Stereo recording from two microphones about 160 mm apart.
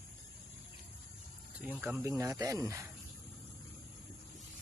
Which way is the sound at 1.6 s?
10° right (ahead or behind).